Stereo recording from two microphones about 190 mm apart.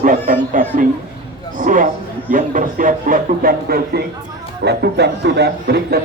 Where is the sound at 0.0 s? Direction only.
45° right (ahead or behind).